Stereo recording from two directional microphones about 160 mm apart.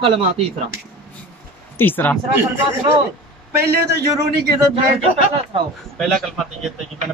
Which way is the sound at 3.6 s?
85° right.